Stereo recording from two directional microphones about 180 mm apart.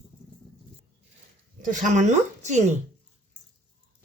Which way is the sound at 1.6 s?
45° right (ahead or behind).